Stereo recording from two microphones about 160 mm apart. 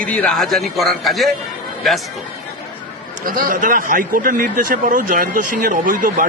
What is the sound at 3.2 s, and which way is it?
Speech, 55° right (ahead or behind).